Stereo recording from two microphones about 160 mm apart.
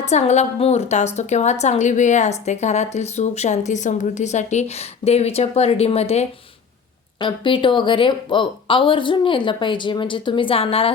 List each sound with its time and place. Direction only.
0.0 s a woman's voice: 45° left (ahead or behind)